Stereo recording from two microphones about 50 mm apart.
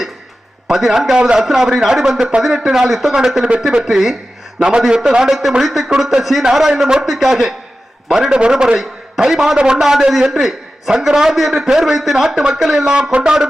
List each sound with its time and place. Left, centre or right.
0.7 s a man's voice: centre
9.6 s speech: centre
9.8 s a man's voice: centre
12.9 s speech: right